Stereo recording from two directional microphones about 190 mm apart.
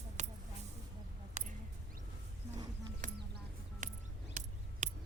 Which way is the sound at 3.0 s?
40° right (ahead or behind).